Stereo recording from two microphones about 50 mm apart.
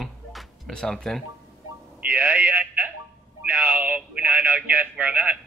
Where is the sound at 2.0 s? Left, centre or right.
Right.